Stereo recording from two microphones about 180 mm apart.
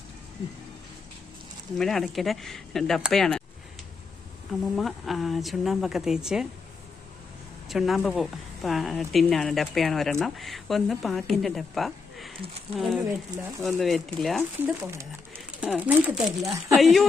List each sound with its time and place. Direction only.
1.8 s a woman's voice: centre (ahead or behind)
4.7 s a woman's voice: centre (ahead or behind)
7.7 s a woman's voice: centre (ahead or behind)
13.1 s speech: 20° right (ahead or behind)
13.7 s a woman's voice: centre (ahead or behind)
15.6 s speech: 10° right (ahead or behind)
16.7 s a woman's voice: centre (ahead or behind)